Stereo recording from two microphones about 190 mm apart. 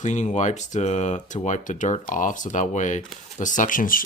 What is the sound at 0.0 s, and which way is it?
Speech, 40° left (ahead or behind).